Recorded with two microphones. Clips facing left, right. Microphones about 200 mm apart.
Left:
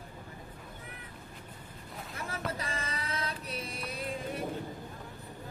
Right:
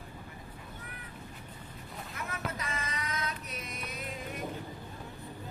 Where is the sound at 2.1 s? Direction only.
30° left (ahead or behind).